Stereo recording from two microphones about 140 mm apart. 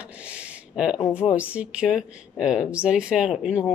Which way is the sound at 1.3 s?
10° right (ahead or behind).